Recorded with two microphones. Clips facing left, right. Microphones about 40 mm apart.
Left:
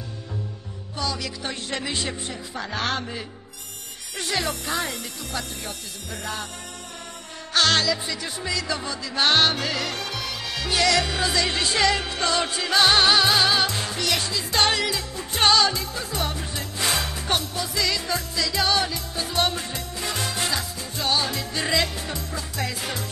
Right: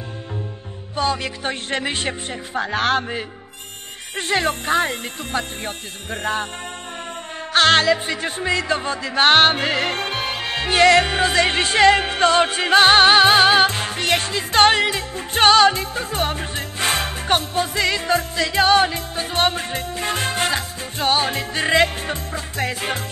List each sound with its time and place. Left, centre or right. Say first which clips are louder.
0.9 s speech: right 7 dB; right
7.5 s music: right 6 dB; right